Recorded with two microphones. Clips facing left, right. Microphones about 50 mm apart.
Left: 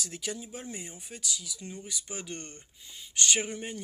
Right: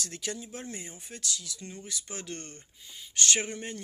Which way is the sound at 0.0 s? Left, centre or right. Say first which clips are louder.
Even; centre.